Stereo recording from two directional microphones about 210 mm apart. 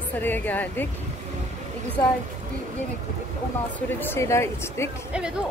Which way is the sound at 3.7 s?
10° left (ahead or behind).